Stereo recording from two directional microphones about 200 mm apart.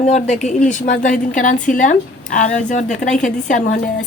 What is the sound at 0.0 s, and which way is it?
A woman's voice, 35° left (ahead or behind).